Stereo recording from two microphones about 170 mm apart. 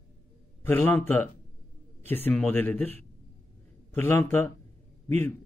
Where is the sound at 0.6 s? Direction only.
10° left (ahead or behind).